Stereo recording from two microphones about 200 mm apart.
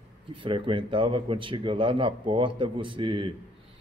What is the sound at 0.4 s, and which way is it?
Speech, 25° right (ahead or behind).